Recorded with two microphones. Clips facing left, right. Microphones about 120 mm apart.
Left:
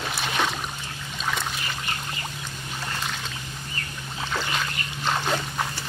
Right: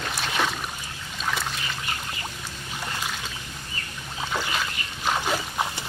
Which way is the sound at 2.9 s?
5° right (ahead or behind).